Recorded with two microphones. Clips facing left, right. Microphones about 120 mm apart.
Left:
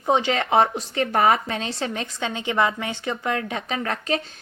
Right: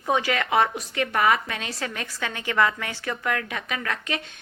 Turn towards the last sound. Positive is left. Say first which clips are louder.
# left 4 dB
turn(degrees=35)  # may be behind; listen again after turning